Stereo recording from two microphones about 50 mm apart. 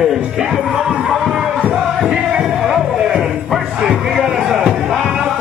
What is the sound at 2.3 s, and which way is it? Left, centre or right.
Music, centre.